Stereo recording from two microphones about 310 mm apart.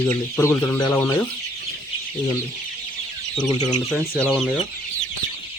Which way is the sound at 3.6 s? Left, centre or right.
Centre.